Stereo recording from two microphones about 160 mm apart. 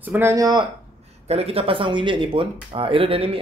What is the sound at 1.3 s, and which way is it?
Speech, 40° right (ahead or behind).